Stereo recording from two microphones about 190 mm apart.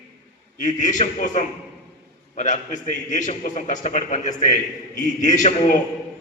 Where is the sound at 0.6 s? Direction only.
40° left (ahead or behind).